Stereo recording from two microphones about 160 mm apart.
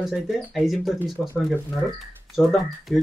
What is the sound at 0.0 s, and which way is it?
Speech, centre (ahead or behind).